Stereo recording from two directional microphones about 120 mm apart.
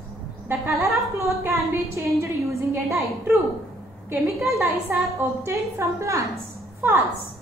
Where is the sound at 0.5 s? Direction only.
20° right (ahead or behind).